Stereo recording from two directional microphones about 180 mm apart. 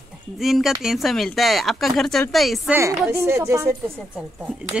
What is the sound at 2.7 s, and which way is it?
A woman's voice, 15° right (ahead or behind).